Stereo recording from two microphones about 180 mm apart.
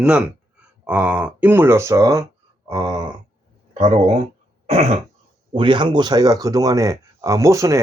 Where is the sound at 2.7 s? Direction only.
20° right (ahead or behind).